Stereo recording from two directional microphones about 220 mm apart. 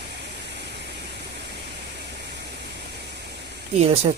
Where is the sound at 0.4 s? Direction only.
50° right (ahead or behind).